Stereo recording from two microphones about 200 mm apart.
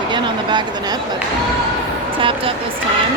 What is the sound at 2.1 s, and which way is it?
Speech, 25° right (ahead or behind).